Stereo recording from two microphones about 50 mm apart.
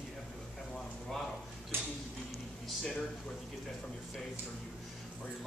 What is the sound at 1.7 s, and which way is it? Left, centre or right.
Tick-tock, right.